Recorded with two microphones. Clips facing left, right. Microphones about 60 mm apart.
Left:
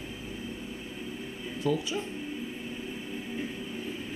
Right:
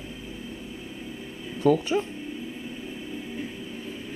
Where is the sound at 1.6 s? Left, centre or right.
Right.